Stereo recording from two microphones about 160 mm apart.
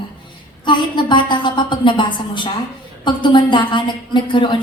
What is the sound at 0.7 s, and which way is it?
A woman's voice, 30° left (ahead or behind).